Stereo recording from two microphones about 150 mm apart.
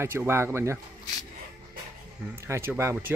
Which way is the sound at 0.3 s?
15° right (ahead or behind).